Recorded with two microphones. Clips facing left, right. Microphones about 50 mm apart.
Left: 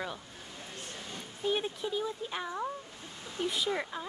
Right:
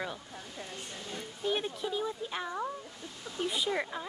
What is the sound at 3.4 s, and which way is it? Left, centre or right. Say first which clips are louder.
Speech: even; centre.